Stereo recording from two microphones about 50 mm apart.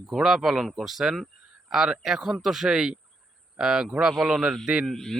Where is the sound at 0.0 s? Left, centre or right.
Centre.